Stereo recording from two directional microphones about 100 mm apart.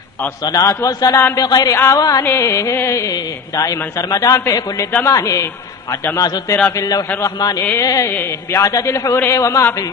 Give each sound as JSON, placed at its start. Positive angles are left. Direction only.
{"t": 0.4, "sound": "music", "side_deg": 40}
{"t": 5.0, "sound": "a man's voice", "side_deg": 30}
{"t": 6.1, "sound": "music", "side_deg": 40}
{"t": 8.1, "sound": "a man's voice", "side_deg": 25}